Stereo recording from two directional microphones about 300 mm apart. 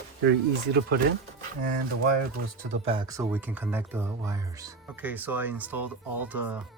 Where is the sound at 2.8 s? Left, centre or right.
Centre.